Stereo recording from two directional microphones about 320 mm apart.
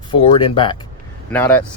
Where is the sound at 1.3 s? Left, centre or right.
Centre.